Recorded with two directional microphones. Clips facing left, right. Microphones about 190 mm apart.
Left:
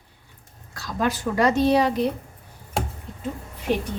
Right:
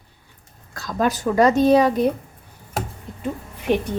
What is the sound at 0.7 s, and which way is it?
Speech, 45° right (ahead or behind).